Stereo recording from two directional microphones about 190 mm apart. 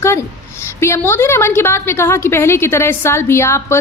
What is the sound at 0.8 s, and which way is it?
A woman's voice, 15° left (ahead or behind).